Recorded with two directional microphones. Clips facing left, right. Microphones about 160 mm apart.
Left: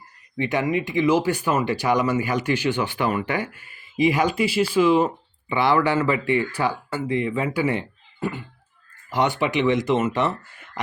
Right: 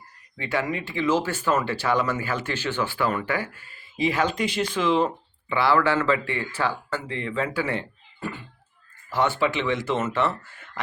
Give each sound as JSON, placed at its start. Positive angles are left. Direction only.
{"t": 0.3, "sound": "speech", "side_deg": 20}